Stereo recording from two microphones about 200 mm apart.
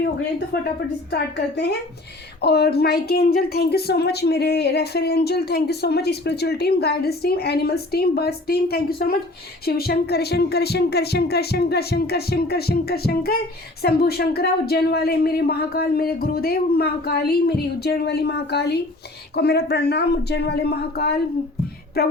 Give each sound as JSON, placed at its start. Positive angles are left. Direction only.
{"t": 0.5, "sound": "speech", "side_deg": 50}